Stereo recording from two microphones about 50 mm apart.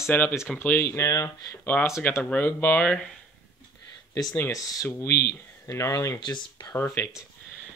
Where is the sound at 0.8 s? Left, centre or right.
Left.